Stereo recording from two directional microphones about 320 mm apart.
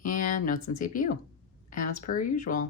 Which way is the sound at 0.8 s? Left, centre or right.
Left.